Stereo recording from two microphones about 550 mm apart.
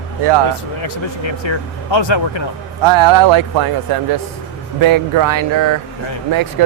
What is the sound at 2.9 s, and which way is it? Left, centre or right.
Speech, right.